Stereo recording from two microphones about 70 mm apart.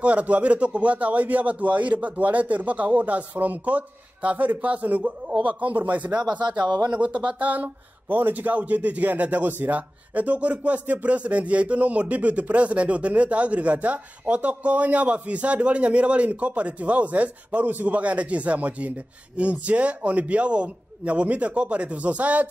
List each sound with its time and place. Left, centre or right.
0.0 s speech: centre
6.6 s speech: right
6.9 s a man's voice: centre